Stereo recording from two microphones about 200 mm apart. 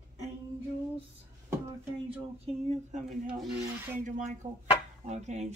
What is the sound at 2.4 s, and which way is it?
Speech, 35° right (ahead or behind).